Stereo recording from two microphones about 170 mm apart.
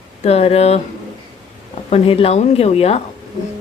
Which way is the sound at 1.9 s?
35° left (ahead or behind).